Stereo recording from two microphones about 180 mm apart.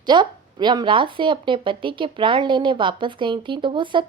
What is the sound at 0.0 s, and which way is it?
Speech, 25° right (ahead or behind).